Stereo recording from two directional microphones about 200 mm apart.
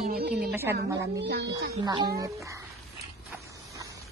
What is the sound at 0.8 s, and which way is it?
Speech, 55° right (ahead or behind).